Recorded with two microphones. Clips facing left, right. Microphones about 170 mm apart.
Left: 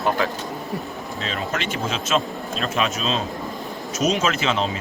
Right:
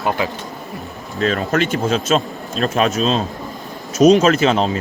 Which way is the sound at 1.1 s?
50° right (ahead or behind).